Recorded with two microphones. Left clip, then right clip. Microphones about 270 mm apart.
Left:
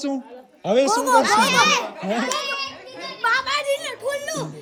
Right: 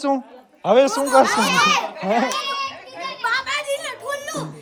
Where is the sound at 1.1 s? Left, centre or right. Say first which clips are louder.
Left 1 dB; centre.